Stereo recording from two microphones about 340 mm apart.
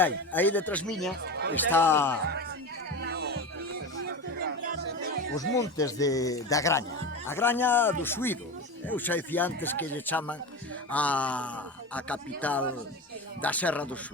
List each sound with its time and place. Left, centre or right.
0.0 s speech: centre
1.2 s speech: right
1.7 s a man's voice: centre
3.0 s music: right
5.5 s a man's voice: centre